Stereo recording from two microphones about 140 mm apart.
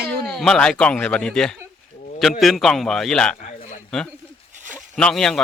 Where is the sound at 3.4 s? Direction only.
65° left (ahead or behind).